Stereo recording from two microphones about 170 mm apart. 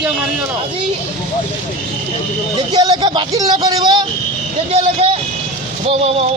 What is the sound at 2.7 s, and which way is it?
Speech, 25° right (ahead or behind).